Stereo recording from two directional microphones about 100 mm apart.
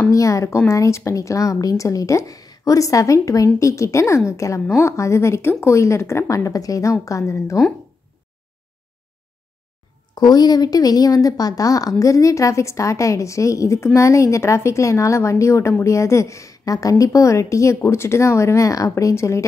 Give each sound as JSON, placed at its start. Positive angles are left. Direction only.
{"t": 0.1, "sound": "a woman's voice", "side_deg": 30}
{"t": 10.1, "sound": "a woman's voice", "side_deg": 45}